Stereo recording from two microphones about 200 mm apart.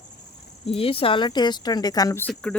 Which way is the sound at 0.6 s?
30° left (ahead or behind).